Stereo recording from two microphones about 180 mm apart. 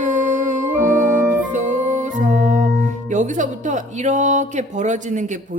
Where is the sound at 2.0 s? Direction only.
45° right (ahead or behind).